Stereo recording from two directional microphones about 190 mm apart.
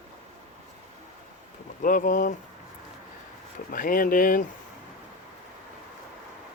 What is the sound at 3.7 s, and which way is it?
Speech, 45° left (ahead or behind).